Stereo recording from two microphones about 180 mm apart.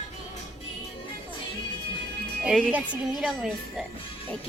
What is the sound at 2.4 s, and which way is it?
Speech, 5° left (ahead or behind).